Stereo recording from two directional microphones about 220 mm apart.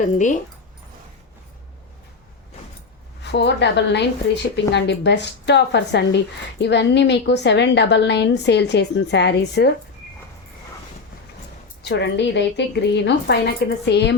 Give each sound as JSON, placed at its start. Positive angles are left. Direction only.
{"t": 0.0, "sound": "speech", "side_deg": 35}
{"t": 3.3, "sound": "a woman's voice", "side_deg": 50}
{"t": 11.8, "sound": "a woman's voice", "side_deg": 50}